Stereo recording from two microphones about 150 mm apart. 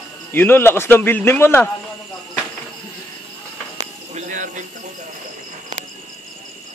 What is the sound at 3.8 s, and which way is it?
Cricket, 55° right (ahead or behind).